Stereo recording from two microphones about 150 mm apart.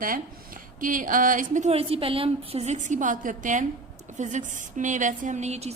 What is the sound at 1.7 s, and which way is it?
A woman's voice, 40° right (ahead or behind).